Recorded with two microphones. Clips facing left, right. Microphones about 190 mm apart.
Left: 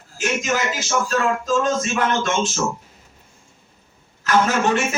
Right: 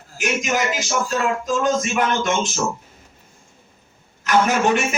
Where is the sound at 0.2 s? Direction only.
15° right (ahead or behind).